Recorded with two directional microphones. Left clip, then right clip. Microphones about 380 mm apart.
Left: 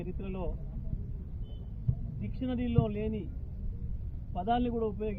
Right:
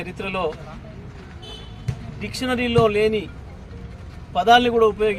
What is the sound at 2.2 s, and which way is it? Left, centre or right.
A man's voice, centre.